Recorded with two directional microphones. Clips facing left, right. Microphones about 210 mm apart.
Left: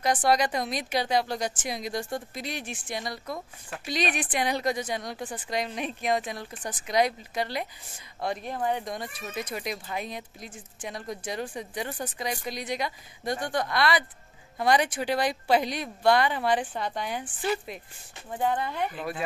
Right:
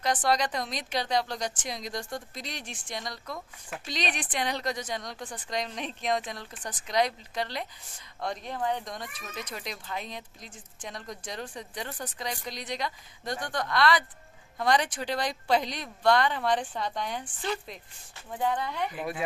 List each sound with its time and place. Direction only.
0.0 s speech: 10° left (ahead or behind)
18.9 s speech: 10° right (ahead or behind)